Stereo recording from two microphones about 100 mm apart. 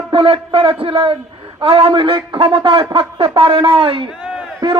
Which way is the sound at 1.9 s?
60° right (ahead or behind).